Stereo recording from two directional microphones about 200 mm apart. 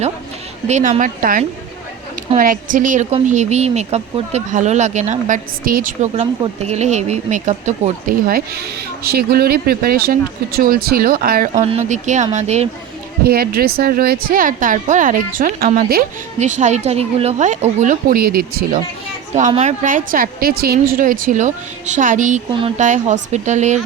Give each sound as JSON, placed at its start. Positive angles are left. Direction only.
{"t": 0.7, "sound": "speech", "side_deg": -35}
{"t": 13.2, "sound": "speech", "side_deg": -50}
{"t": 16.4, "sound": "speech", "side_deg": -35}